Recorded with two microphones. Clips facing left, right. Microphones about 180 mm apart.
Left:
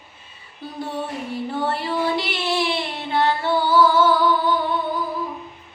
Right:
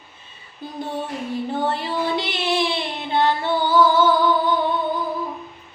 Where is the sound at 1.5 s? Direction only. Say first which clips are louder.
Left 1 dB; 20° right (ahead or behind).